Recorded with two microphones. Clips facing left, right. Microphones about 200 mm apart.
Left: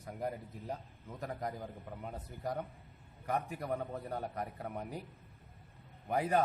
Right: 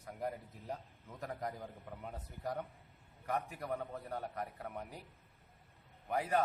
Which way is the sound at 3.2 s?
15° left (ahead or behind).